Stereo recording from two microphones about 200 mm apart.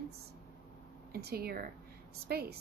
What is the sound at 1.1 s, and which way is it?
A woman's voice, 50° right (ahead or behind).